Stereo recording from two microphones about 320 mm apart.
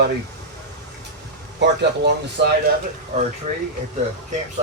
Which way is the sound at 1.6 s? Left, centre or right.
Right.